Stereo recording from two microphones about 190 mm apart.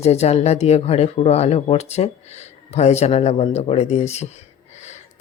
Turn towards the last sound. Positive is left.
turn(degrees=35)  # may be behind; listen again after turning